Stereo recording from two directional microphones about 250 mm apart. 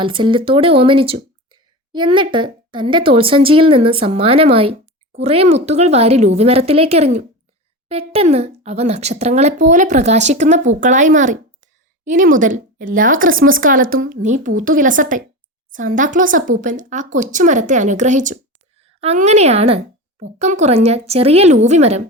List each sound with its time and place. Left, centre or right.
0.0 s speech: centre